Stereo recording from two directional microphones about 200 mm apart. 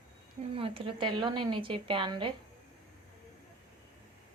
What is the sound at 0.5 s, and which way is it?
A woman's voice, 25° right (ahead or behind).